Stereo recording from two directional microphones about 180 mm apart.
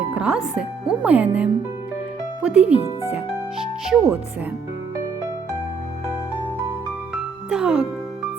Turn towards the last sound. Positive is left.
turn(degrees=-5)  # may be behind; listen again after turning